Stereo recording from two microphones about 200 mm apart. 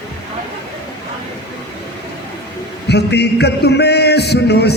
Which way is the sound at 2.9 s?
55° left (ahead or behind).